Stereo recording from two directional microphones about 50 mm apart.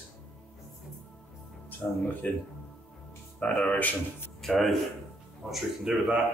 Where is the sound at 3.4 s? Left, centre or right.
Left.